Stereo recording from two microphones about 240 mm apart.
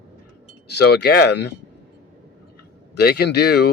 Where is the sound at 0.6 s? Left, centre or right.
Left.